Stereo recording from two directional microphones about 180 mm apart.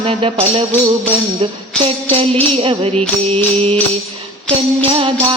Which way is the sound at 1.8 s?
30° right (ahead or behind).